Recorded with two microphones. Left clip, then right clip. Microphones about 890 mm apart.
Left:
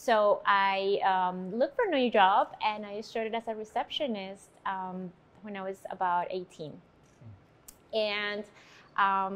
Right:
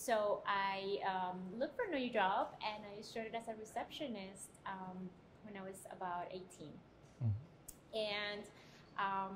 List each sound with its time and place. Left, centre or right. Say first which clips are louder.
0.0 s a woman's voice: left 12 dB; left
7.9 s a woman's voice: left 10 dB; left